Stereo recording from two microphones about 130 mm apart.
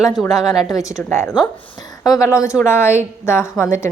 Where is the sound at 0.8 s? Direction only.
20° left (ahead or behind).